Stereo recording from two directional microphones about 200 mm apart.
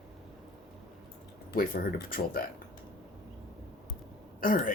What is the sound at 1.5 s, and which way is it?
Speech, 50° left (ahead or behind).